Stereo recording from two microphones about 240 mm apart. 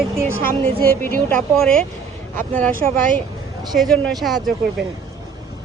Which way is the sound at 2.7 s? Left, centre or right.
Right.